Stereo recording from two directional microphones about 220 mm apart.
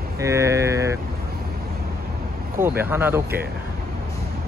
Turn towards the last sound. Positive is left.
turn(degrees=-10)  # may be behind; listen again after turning